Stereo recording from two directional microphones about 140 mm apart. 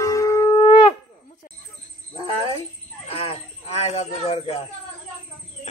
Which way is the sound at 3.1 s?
45° left (ahead or behind).